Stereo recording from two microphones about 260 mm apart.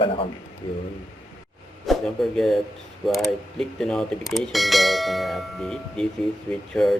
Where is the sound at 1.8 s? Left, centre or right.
Centre.